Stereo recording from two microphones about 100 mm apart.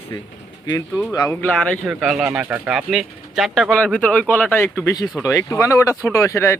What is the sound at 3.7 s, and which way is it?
Speech, 10° left (ahead or behind).